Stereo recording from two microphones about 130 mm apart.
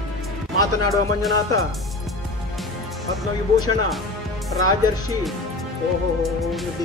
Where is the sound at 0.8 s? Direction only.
25° left (ahead or behind).